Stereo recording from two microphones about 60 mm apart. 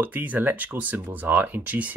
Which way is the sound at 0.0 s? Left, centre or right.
Right.